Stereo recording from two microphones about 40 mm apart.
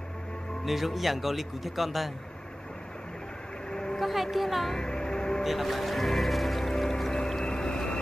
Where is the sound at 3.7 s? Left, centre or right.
Centre.